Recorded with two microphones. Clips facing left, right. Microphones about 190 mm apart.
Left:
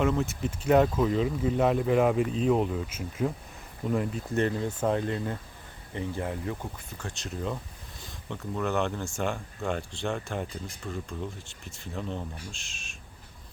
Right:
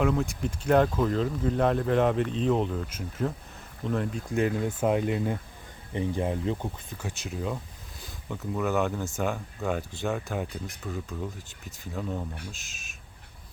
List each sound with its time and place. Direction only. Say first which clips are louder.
0.0 s speech: even; centre (ahead or behind); by 6.7 s 20° right (ahead or behind)
7.0 s speech: right 1 dB; 5° right (ahead or behind)